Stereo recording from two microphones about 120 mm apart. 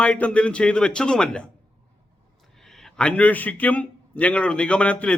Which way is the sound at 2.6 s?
5° left (ahead or behind).